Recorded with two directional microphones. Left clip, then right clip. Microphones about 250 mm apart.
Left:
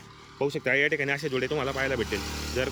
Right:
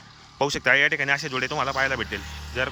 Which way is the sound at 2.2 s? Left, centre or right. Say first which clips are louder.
Left 4 dB; left.